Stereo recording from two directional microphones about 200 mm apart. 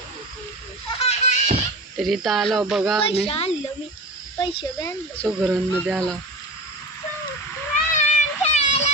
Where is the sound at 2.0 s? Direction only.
Centre (ahead or behind).